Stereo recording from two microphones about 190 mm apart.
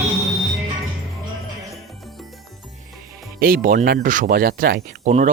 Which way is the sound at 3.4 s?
50° right (ahead or behind).